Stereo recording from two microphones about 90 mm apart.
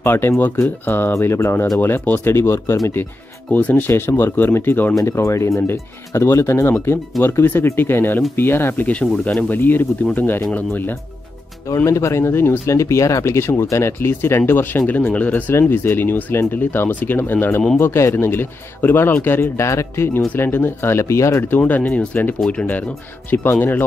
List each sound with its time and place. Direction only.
0.0 s speech: 25° left (ahead or behind)
3.5 s speech: 20° left (ahead or behind)
11.7 s speech: 35° left (ahead or behind)
21.5 s speech: 20° left (ahead or behind)